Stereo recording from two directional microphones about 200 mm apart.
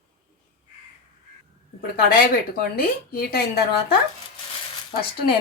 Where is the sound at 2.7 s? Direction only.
50° left (ahead or behind).